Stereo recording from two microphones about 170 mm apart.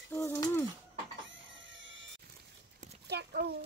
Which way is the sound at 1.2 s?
90° right.